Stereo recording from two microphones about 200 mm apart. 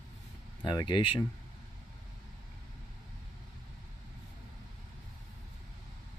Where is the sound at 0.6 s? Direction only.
25° left (ahead or behind).